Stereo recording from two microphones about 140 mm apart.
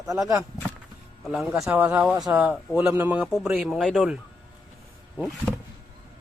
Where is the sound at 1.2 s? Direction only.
Centre (ahead or behind).